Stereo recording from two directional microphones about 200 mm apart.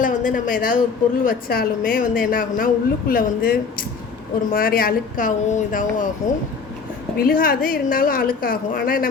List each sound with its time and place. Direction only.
0.0 s a woman's voice: 40° left (ahead or behind)